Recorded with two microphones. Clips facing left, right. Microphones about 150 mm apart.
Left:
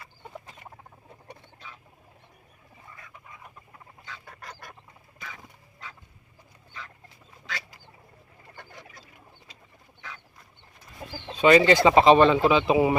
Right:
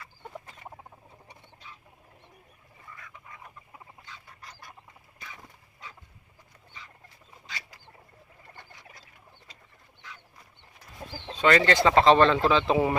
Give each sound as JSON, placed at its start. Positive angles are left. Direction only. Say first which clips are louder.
{"t": 1.3, "sound": "a sound", "louder": "left 5 dB", "side_deg": 90}
{"t": 4.0, "sound": "goose", "louder": "left 5 dB", "side_deg": 75}
{"t": 11.3, "sound": "speech", "louder": "left 5 dB", "side_deg": 10}